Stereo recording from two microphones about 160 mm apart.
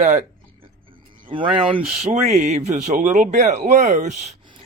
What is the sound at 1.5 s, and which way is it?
Speech, 35° right (ahead or behind).